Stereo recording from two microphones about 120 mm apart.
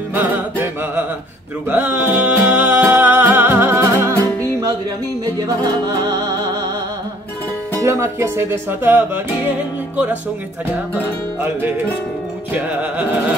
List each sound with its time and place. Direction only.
0.1 s music: 15° right (ahead or behind)
5.2 s music: 35° right (ahead or behind)
7.8 s speech: 20° right (ahead or behind)